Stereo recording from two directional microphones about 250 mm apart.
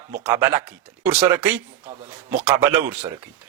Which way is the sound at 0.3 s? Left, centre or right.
Centre.